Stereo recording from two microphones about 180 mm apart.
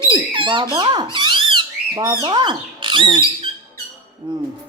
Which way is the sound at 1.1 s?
25° right (ahead or behind).